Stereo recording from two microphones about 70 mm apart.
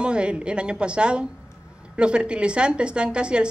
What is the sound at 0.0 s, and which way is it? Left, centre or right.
A woman's voice, centre.